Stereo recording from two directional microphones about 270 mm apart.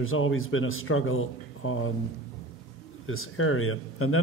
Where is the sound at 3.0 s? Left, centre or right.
Left.